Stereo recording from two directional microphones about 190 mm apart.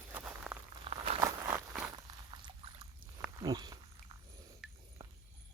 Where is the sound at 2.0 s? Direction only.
25° right (ahead or behind).